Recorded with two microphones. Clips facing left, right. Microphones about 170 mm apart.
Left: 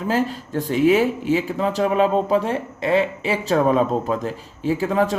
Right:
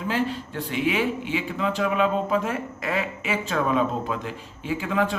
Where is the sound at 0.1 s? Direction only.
40° left (ahead or behind).